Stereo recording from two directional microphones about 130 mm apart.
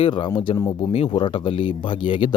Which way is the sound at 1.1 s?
40° left (ahead or behind).